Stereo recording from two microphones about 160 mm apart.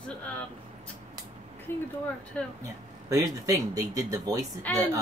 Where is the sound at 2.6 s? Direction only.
20° right (ahead or behind).